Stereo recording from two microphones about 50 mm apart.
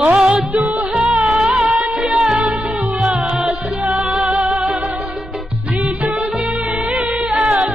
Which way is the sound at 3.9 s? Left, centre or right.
Centre.